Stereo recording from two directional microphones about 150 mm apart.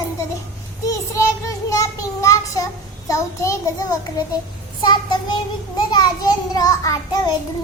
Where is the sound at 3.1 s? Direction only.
20° left (ahead or behind).